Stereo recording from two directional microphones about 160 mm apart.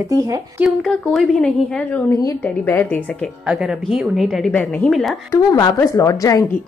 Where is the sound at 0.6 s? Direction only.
5° left (ahead or behind).